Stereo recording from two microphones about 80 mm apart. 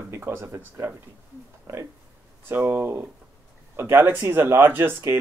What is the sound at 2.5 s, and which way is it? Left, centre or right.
Speech, right.